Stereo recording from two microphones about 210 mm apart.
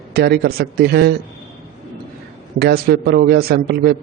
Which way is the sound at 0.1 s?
50° right (ahead or behind).